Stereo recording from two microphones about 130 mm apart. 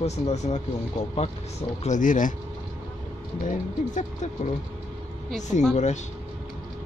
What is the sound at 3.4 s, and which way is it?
Speech, 70° left (ahead or behind).